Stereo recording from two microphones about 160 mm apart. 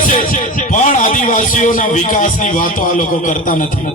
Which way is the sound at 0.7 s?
55° left (ahead or behind).